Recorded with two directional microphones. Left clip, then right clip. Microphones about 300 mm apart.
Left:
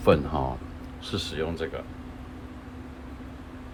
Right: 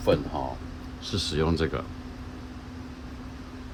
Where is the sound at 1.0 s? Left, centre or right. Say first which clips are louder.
Right 3 dB; centre.